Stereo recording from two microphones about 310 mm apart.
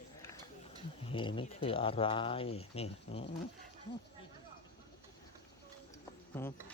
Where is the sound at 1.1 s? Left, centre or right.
Centre.